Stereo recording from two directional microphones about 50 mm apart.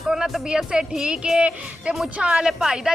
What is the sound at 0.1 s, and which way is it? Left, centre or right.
Speech, centre.